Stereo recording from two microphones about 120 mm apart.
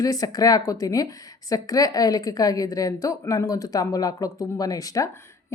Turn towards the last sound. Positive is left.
turn(degrees=30)  # may be behind; listen again after turning